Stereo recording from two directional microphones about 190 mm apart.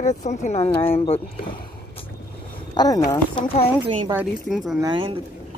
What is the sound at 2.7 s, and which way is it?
Speech, 20° left (ahead or behind).